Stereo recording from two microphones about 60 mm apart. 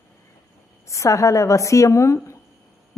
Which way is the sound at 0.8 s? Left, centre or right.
Left.